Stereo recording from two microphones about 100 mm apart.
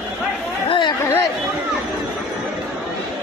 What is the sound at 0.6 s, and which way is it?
Chatter, 55° left (ahead or behind).